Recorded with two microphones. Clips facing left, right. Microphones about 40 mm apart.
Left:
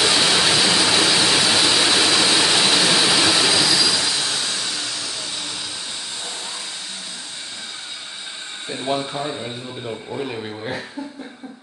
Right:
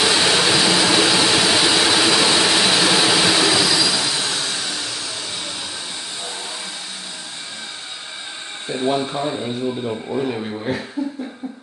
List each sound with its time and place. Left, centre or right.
0.0 s a sound: centre
8.8 s speech: centre
9.8 s speech: right
10.3 s speech: centre